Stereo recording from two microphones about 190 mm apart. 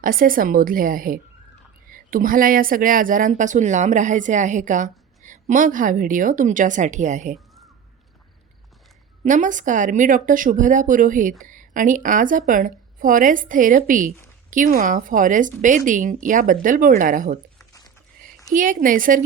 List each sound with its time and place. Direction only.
0.0 s speech: 45° right (ahead or behind)
9.2 s speech: 40° right (ahead or behind)
18.5 s speech: 45° right (ahead or behind)